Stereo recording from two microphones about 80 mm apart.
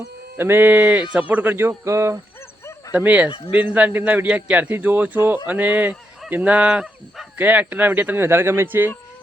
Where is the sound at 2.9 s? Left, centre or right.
Centre.